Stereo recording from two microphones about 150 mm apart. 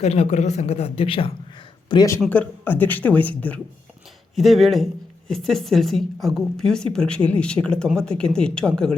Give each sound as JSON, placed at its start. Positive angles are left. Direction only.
{"t": 0.0, "sound": "a man's voice", "side_deg": 45}
{"t": 2.2, "sound": "speech", "side_deg": 10}